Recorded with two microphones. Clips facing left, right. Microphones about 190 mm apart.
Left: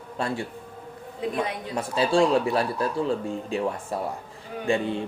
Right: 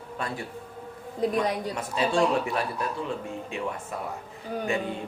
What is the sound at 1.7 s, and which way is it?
Speech, 30° left (ahead or behind).